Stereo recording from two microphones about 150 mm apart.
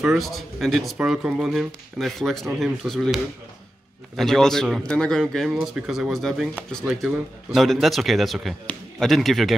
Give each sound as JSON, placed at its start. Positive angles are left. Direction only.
{"t": 0.0, "sound": "speech", "side_deg": 0}
{"t": 4.2, "sound": "speech", "side_deg": 5}